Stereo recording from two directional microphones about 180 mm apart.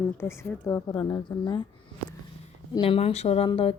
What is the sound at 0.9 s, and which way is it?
Speech, 25° left (ahead or behind).